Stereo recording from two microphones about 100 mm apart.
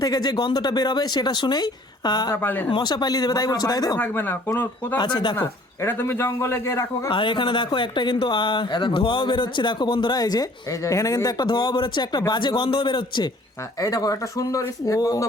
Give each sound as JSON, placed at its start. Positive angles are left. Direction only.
{"t": 0.0, "sound": "speech", "side_deg": 40}
{"t": 2.3, "sound": "a man's voice", "side_deg": 20}
{"t": 2.6, "sound": "speech", "side_deg": 50}
{"t": 3.9, "sound": "a man's voice", "side_deg": 20}
{"t": 4.9, "sound": "speech", "side_deg": 50}
{"t": 5.4, "sound": "a man's voice", "side_deg": 20}
{"t": 7.1, "sound": "speech", "side_deg": 55}
{"t": 11.4, "sound": "speech", "side_deg": 50}
{"t": 13.7, "sound": "speech", "side_deg": 35}